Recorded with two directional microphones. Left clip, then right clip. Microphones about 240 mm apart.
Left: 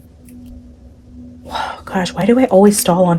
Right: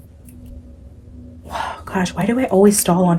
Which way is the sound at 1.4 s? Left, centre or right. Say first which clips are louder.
Left 3 dB; left.